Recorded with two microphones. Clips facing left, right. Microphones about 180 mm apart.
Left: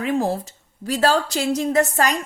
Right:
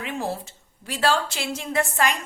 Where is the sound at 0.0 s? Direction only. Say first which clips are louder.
Left 8 dB; 40° left (ahead or behind).